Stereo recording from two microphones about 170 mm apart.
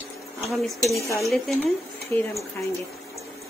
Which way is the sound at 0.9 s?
15° left (ahead or behind).